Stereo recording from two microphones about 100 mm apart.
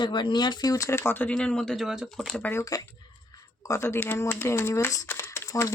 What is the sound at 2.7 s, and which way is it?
Speech, 35° left (ahead or behind).